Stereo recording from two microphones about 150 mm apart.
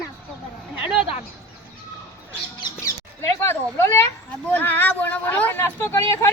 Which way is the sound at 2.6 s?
20° left (ahead or behind).